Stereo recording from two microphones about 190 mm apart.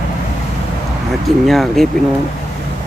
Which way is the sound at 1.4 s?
Centre (ahead or behind).